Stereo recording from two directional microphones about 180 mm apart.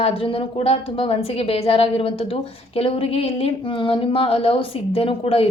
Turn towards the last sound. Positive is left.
turn(degrees=30)  # may be behind; listen again after turning